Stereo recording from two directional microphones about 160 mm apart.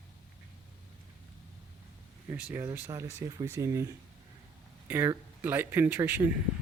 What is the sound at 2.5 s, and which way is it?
Speech, 15° right (ahead or behind).